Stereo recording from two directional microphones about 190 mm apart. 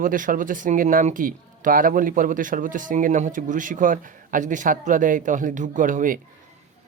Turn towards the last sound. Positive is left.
turn(degrees=-45)  # may be behind; listen again after turning